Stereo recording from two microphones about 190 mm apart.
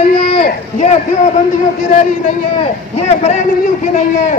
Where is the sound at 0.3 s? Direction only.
30° left (ahead or behind).